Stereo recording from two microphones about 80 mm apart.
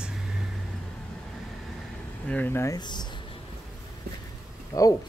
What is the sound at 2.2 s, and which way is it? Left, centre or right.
Speech, centre.